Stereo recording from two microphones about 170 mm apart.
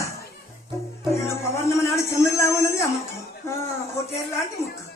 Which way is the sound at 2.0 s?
15° left (ahead or behind).